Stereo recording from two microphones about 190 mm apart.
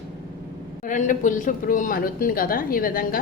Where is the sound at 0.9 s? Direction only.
45° left (ahead or behind).